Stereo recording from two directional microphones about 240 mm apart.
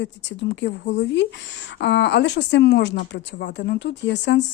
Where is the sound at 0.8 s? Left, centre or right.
Left.